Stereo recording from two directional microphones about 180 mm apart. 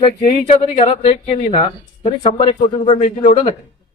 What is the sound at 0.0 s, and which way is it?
Speech, 35° left (ahead or behind).